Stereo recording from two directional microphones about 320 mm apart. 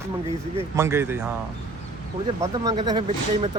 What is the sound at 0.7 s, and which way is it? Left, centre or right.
Speech, centre.